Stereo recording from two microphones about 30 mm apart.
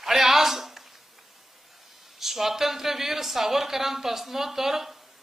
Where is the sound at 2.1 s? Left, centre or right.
Centre.